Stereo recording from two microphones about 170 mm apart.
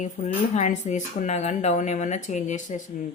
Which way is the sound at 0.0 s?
45° left (ahead or behind).